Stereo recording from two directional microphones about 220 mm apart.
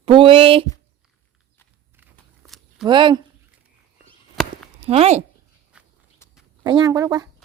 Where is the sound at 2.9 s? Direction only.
20° right (ahead or behind).